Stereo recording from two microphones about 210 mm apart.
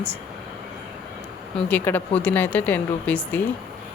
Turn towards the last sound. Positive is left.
turn(degrees=10)  # may be behind; listen again after turning